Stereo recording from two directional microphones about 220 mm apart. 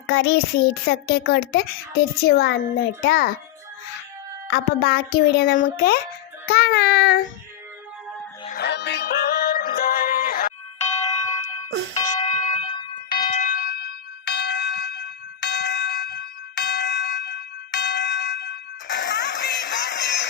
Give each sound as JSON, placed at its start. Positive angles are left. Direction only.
{"t": 0.1, "sound": "a child's voice", "side_deg": 50}
{"t": 4.5, "sound": "a child's voice", "side_deg": 45}
{"t": 8.4, "sound": "music", "side_deg": 45}
{"t": 11.9, "sound": "music", "side_deg": 20}
{"t": 12.3, "sound": "fire alarm", "side_deg": 35}
{"t": 13.2, "sound": "a sound", "side_deg": 35}
{"t": 14.3, "sound": "bell", "side_deg": 50}